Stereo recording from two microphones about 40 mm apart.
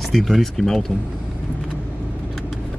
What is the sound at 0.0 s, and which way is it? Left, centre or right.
Speech, centre.